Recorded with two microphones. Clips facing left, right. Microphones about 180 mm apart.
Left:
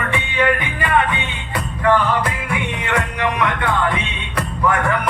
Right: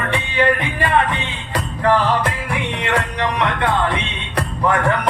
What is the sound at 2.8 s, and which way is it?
Music, 30° right (ahead or behind).